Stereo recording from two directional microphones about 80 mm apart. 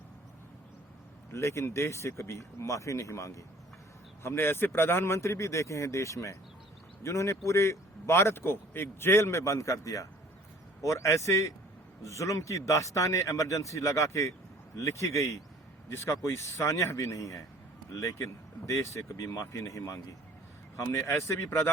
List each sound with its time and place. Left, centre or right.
1.3 s a man's voice: left
4.2 s a man's voice: left